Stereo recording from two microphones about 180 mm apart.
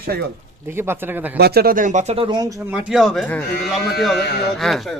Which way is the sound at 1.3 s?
60° right (ahead or behind).